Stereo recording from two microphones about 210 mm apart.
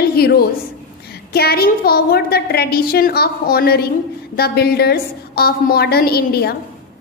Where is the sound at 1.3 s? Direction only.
50° left (ahead or behind).